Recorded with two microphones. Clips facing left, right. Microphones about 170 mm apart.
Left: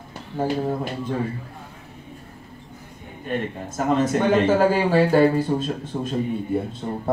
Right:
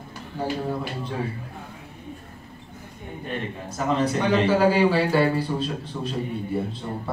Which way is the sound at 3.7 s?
45° left (ahead or behind).